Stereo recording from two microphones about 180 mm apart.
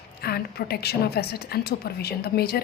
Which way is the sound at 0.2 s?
60° left (ahead or behind).